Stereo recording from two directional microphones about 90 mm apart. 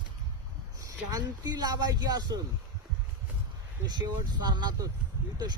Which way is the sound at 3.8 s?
50° right (ahead or behind).